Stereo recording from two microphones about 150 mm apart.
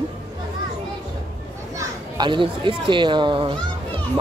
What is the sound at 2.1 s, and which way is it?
Speech, 30° right (ahead or behind).